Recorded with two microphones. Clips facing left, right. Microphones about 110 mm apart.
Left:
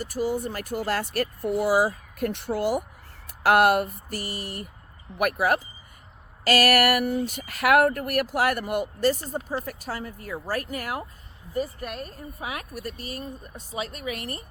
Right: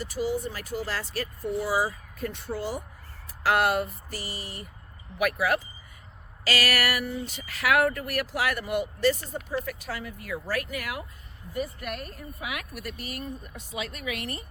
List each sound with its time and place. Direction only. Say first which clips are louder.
0.0 s speech: left 2 dB; 50° left (ahead or behind); by 2.8 s 70° left (ahead or behind)
3.2 s speech: left 5 dB; 60° left (ahead or behind)
5.1 s speech: left 2 dB; 45° left (ahead or behind)